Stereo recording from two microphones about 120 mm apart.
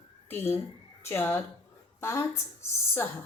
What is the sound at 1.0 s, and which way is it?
A woman's voice, 20° left (ahead or behind).